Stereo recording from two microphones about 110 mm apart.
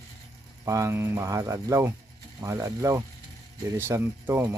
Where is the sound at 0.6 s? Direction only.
25° right (ahead or behind).